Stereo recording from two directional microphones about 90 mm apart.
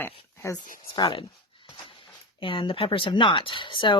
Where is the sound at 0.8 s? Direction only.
60° left (ahead or behind).